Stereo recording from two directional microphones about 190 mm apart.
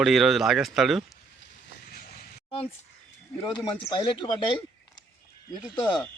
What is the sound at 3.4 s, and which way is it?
A man's voice, 25° left (ahead or behind).